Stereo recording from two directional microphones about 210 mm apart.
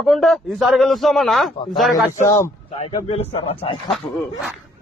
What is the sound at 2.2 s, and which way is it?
Speech, 15° left (ahead or behind).